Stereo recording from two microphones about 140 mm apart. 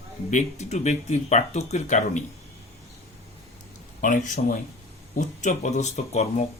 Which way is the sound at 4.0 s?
65° left (ahead or behind).